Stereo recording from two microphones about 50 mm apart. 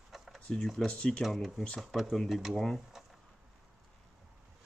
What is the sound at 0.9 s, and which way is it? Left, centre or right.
Speech, left.